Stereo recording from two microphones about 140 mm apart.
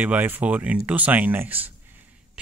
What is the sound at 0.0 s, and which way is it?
Speech, 10° right (ahead or behind).